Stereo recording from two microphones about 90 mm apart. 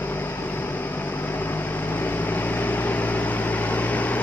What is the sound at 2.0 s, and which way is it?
Vehicle, 20° left (ahead or behind).